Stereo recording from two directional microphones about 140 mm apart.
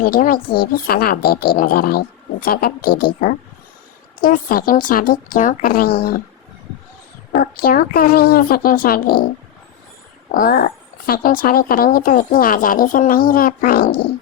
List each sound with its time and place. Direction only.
0.0 s a woman's voice: 90° left
7.3 s a woman's voice: 85° left
10.3 s a woman's voice: 85° left